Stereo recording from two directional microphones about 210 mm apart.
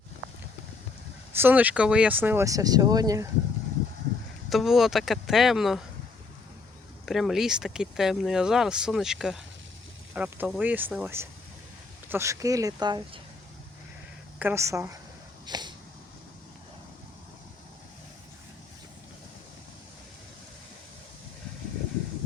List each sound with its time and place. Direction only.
1.4 s speech: 10° right (ahead or behind)
4.4 s speech: centre (ahead or behind)
7.0 s speech: centre (ahead or behind); by 13.0 s 20° right (ahead or behind)
14.3 s speech: 10° right (ahead or behind)
15.4 s a sound: 20° right (ahead or behind)